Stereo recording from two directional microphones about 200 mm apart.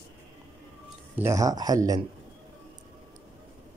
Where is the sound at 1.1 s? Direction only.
15° right (ahead or behind).